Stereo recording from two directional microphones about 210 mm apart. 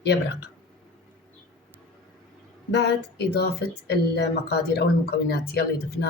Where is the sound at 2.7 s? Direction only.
50° left (ahead or behind).